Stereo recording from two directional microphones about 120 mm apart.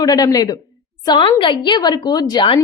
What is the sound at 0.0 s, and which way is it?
A woman's voice, 30° left (ahead or behind).